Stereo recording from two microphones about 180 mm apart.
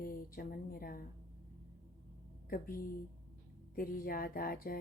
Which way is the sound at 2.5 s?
55° left (ahead or behind).